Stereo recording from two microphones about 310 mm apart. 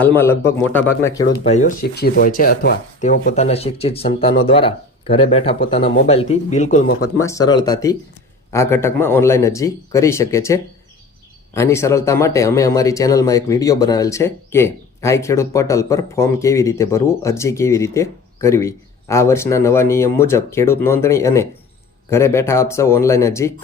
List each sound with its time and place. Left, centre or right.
0.0 s speech: centre
1.5 s speech: left
7.2 s speech: centre